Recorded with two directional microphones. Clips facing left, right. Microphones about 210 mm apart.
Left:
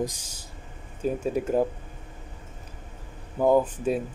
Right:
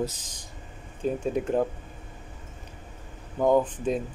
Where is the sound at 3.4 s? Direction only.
5° left (ahead or behind).